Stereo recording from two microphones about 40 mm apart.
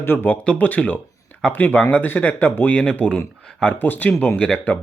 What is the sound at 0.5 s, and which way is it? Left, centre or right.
Speech, left.